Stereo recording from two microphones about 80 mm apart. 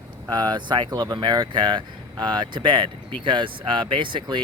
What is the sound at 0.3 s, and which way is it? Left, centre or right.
Speech, right.